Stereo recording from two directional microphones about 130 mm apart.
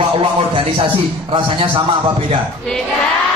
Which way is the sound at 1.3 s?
40° right (ahead or behind).